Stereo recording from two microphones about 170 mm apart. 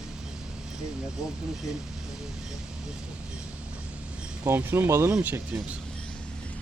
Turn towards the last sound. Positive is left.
turn(degrees=-10)  # may be behind; listen again after turning